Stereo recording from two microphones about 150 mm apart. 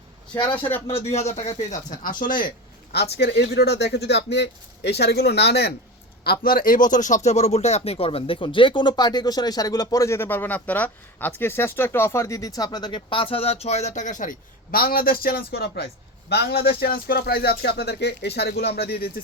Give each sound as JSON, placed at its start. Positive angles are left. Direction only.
{"t": 0.5, "sound": "speech", "side_deg": 15}
{"t": 1.1, "sound": "speech", "side_deg": 50}
{"t": 2.9, "sound": "speech", "side_deg": 90}